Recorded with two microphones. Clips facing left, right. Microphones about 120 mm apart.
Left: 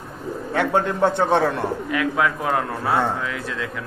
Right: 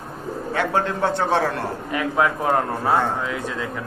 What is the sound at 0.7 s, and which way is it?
Speech, centre (ahead or behind).